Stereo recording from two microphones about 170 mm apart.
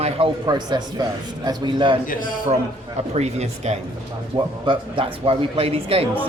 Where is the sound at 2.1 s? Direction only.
55° left (ahead or behind).